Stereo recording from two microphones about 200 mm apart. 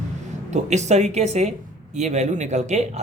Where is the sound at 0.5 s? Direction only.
35° right (ahead or behind).